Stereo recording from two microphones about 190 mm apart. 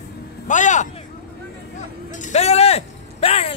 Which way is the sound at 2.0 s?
40° left (ahead or behind).